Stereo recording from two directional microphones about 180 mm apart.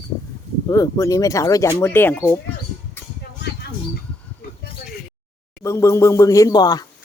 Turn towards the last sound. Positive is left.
turn(degrees=20)  # may be behind; listen again after turning